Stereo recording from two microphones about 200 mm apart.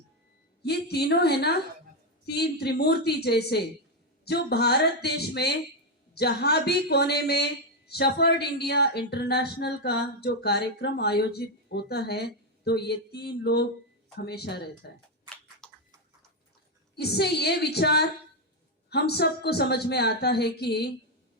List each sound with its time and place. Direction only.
0.6 s a woman's voice: 55° left (ahead or behind)
15.6 s a sound: 5° left (ahead or behind)
16.9 s speech: 55° left (ahead or behind)